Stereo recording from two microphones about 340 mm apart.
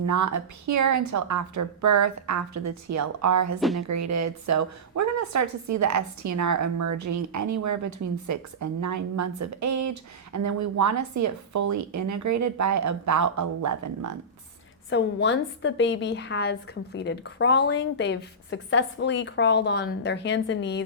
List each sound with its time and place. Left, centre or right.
0.0 s a woman's voice: right
14.8 s a woman's voice: left